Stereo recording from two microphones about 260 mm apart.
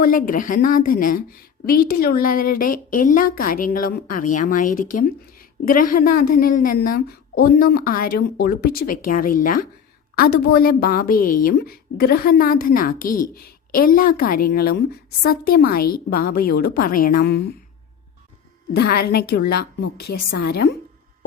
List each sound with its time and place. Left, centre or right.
0.0 s a woman's voice: left
18.8 s a woman's voice: left